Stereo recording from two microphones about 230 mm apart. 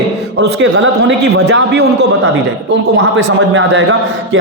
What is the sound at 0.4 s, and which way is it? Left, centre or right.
A man's voice, right.